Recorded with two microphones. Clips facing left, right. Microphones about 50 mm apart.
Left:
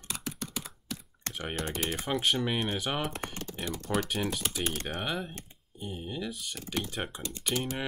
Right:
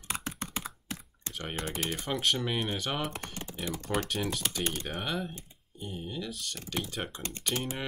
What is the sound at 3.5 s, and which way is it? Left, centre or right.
Speech, centre.